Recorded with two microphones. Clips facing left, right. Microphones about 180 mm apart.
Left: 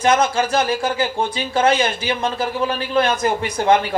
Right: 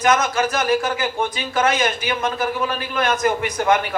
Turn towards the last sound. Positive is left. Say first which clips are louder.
# left 1 dB
turn(degrees=30)  # may be behind; listen again after turning